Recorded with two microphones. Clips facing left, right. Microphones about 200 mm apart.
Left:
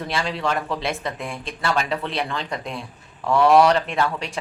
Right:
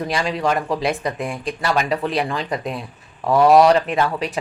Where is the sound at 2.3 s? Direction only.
15° right (ahead or behind).